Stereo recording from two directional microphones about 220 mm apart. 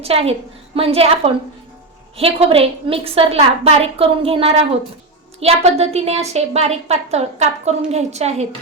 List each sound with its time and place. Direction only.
0.0 s a woman's voice: 25° right (ahead or behind)